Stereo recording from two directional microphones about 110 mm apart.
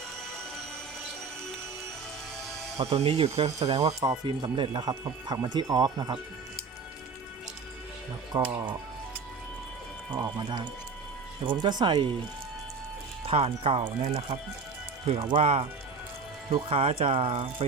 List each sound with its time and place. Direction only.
2.7 s speech: 65° right (ahead or behind)
4.3 s speech: 50° right (ahead or behind)
8.3 s speech: 45° right (ahead or behind)
10.1 s speech: 40° right (ahead or behind)
13.2 s speech: 60° right (ahead or behind)